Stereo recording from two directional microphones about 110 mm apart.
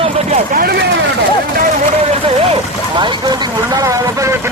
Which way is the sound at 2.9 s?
45° right (ahead or behind).